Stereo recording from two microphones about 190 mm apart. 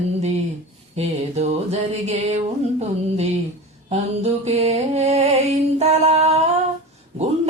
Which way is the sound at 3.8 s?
35° right (ahead or behind).